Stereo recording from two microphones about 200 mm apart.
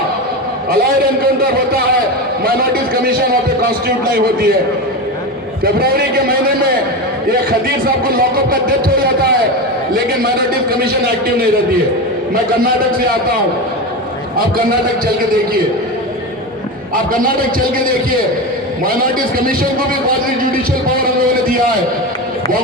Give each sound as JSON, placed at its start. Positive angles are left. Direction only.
{"t": 1.2, "sound": "a man's voice", "side_deg": -45}
{"t": 5.6, "sound": "a man's voice", "side_deg": -50}
{"t": 8.0, "sound": "a man's voice", "side_deg": -45}
{"t": 16.9, "sound": "a man's voice", "side_deg": -45}